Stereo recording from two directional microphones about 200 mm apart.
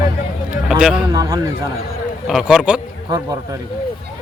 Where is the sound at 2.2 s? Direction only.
Centre (ahead or behind).